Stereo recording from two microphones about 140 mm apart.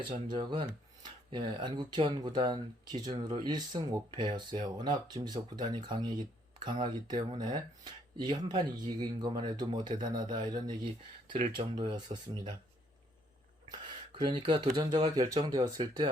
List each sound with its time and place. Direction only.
0.3 s speech: 30° right (ahead or behind)
13.7 s speech: 30° right (ahead or behind)